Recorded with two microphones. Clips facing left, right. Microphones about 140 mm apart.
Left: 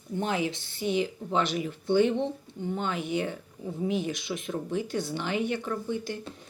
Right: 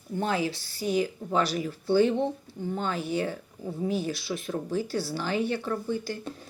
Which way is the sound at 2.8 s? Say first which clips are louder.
Right 1 dB; 20° left (ahead or behind).